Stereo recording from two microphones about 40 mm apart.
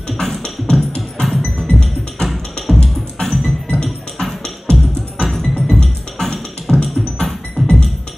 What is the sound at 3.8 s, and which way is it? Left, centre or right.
Music, centre.